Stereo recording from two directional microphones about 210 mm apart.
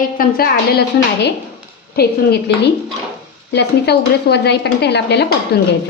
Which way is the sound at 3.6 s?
50° left (ahead or behind).